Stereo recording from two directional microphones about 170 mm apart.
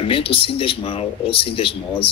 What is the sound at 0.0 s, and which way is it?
Speech, 30° left (ahead or behind).